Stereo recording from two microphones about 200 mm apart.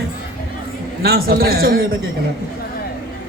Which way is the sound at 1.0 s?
50° right (ahead or behind).